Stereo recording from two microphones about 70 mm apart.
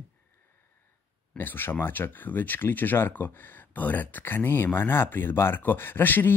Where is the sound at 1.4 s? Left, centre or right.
Left.